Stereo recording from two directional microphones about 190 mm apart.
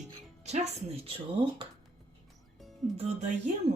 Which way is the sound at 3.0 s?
35° right (ahead or behind).